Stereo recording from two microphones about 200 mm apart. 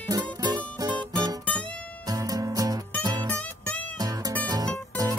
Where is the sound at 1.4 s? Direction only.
5° left (ahead or behind).